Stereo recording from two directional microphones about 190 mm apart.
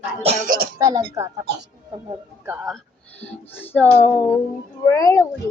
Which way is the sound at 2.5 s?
5° right (ahead or behind).